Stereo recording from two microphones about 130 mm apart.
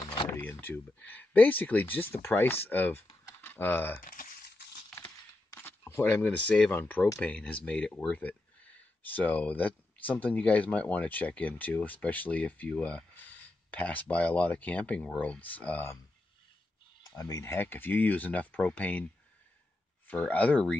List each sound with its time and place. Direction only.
0.3 s speech: 15° left (ahead or behind)
4.0 s a sound: 90° left
4.9 s a sound: 15° left (ahead or behind)
6.5 s speech: 5° left (ahead or behind)
17.2 s speech: 25° left (ahead or behind)
20.1 s speech: 10° left (ahead or behind)